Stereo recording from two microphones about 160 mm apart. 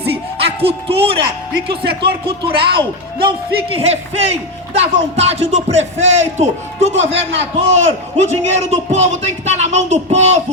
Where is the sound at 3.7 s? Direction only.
40° right (ahead or behind).